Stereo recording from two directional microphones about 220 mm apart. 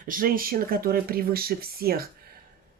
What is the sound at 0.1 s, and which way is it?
Speech, 40° right (ahead or behind).